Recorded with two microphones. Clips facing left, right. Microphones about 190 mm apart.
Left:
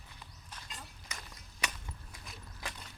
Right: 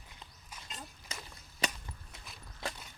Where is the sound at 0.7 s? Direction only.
25° right (ahead or behind).